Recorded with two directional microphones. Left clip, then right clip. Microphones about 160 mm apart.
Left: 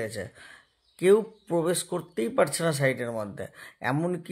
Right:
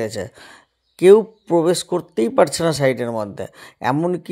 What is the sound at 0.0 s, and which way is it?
Speech, 45° right (ahead or behind).